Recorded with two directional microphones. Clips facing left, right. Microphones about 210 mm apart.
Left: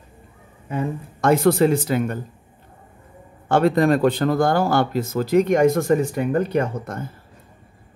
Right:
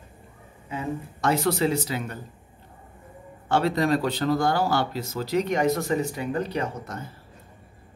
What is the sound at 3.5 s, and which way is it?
Speech, 50° left (ahead or behind).